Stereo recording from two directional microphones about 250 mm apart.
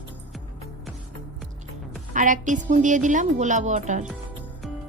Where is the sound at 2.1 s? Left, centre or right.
Right.